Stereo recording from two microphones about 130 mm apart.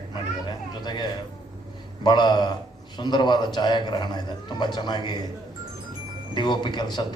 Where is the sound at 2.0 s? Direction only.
35° left (ahead or behind).